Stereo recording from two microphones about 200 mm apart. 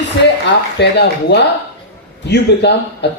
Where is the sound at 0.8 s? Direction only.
55° left (ahead or behind).